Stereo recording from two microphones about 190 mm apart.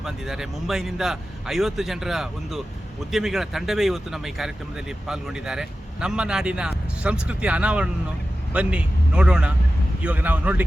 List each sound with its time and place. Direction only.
0.0 s a man's voice: centre (ahead or behind)